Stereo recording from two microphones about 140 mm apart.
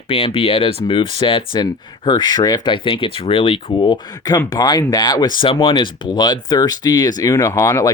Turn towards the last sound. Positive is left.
turn(degrees=20)  # may be behind; listen again after turning